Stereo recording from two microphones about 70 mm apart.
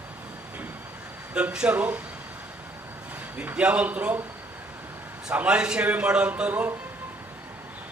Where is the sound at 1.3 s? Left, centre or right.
Centre.